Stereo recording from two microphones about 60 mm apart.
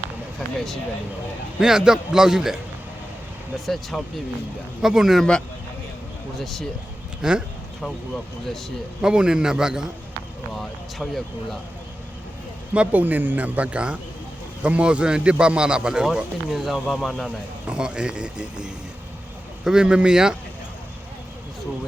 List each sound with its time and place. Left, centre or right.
0.3 s speech: centre
1.5 s speech: centre
3.9 s speech: centre
4.8 s speech: centre
6.4 s speech: centre
7.2 s speech: centre
9.0 s speech: centre
10.5 s speech: centre
12.7 s speech: right; by 17.3 s centre
17.7 s speech: centre